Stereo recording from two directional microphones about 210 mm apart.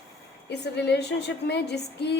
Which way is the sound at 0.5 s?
55° left (ahead or behind).